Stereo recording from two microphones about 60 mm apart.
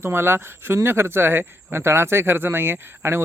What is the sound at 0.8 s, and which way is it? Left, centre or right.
Speech, right.